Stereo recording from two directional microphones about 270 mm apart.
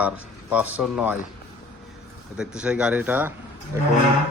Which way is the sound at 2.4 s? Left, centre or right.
Centre.